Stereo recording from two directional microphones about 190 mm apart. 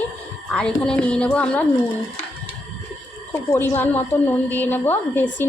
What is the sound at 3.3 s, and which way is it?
Speech, 15° left (ahead or behind).